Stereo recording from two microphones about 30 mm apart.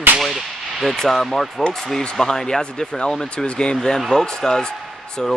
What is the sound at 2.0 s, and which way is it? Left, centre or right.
Speech, centre.